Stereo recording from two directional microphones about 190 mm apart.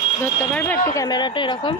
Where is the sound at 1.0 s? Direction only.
25° left (ahead or behind).